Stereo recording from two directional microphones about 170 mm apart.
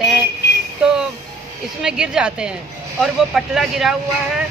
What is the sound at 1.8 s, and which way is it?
A woman's voice, 5° right (ahead or behind).